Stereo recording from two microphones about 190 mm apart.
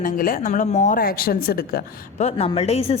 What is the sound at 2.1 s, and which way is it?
Speech, 30° left (ahead or behind).